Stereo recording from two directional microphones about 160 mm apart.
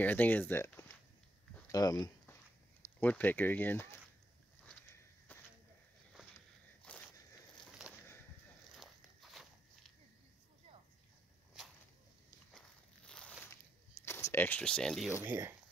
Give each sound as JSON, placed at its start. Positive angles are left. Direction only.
{"t": 0.0, "sound": "speech", "side_deg": 10}
{"t": 2.8, "sound": "speech", "side_deg": 10}
{"t": 5.3, "sound": "a sound", "side_deg": 10}
{"t": 6.8, "sound": "walk", "side_deg": 10}
{"t": 7.6, "sound": "a sound", "side_deg": -5}
{"t": 8.7, "sound": "walk", "side_deg": 0}
{"t": 12.5, "sound": "walk", "side_deg": 5}
{"t": 14.0, "sound": "speech", "side_deg": 15}
{"t": 15.0, "sound": "speech", "side_deg": -10}